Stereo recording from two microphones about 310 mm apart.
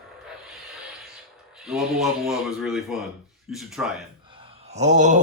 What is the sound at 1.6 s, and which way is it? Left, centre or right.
Speech, centre.